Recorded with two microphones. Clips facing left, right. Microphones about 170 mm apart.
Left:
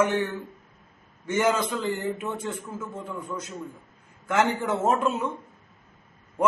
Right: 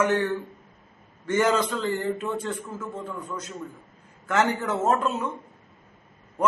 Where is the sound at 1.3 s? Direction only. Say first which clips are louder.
Right 1 dB; 10° left (ahead or behind).